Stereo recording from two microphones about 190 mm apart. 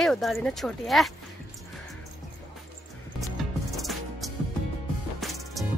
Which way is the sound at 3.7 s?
Centre (ahead or behind).